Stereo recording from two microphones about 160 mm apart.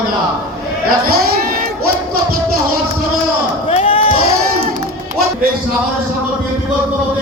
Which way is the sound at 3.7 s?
35° left (ahead or behind).